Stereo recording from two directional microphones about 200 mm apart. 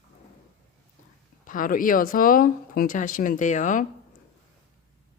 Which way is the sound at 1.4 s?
40° left (ahead or behind).